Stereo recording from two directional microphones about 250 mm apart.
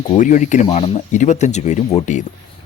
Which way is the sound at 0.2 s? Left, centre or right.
Left.